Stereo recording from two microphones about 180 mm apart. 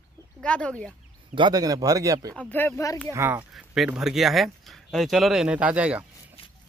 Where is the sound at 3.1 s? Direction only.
15° right (ahead or behind).